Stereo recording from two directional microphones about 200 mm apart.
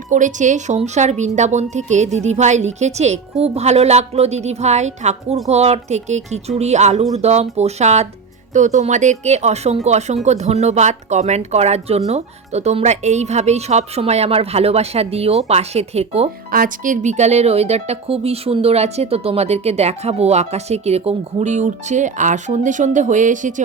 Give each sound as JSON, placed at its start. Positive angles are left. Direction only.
{"t": 0.1, "sound": "speech", "side_deg": -40}
{"t": 16.5, "sound": "speech", "side_deg": -45}